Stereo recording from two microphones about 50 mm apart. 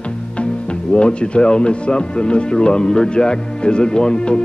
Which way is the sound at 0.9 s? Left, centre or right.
Left.